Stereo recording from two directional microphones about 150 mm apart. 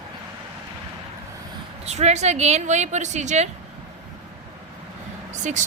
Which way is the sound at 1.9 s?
50° right (ahead or behind).